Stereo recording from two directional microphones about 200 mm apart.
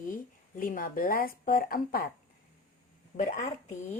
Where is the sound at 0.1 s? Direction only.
40° left (ahead or behind).